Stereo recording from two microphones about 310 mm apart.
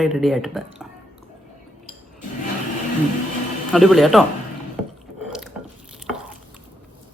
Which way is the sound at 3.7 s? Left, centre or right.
Centre.